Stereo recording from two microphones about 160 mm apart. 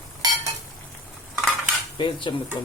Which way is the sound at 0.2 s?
25° right (ahead or behind).